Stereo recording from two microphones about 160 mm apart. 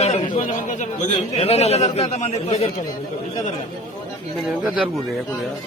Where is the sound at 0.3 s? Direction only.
55° left (ahead or behind).